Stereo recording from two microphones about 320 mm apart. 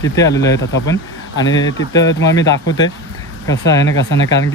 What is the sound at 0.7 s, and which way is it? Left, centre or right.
Speech, left.